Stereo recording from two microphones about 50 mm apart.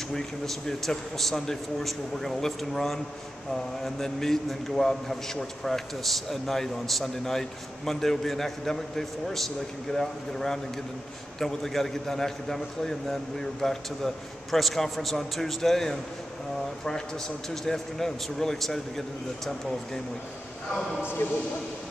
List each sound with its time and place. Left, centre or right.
0.1 s a man's voice: centre
17.6 s a man's voice: centre
21.2 s speech: left